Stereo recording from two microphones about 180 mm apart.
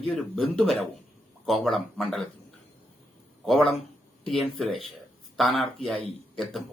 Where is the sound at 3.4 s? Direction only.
Centre (ahead or behind).